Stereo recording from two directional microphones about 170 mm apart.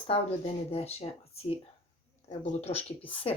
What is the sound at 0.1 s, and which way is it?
Speech, 35° left (ahead or behind).